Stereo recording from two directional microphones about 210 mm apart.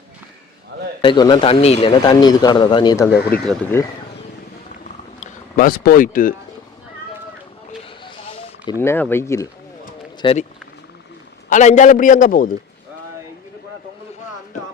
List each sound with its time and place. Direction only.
1.0 s a man's voice: 20° left (ahead or behind)
3.1 s speech: 45° left (ahead or behind)
3.5 s speech: 10° left (ahead or behind)
5.2 s speech: 40° left (ahead or behind)
7.9 s a sound: 25° left (ahead or behind)
8.8 s a man's voice: 10° left (ahead or behind)
11.4 s a man's voice: 35° left (ahead or behind)